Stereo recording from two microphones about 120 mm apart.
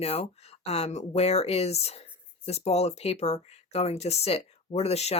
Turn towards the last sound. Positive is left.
turn(degrees=60)  # may be behind; listen again after turning